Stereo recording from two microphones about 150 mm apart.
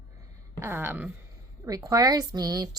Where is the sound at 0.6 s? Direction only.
15° right (ahead or behind).